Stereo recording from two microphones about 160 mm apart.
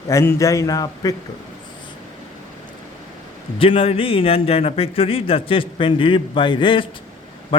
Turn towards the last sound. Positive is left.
turn(degrees=30)  # may be behind; listen again after turning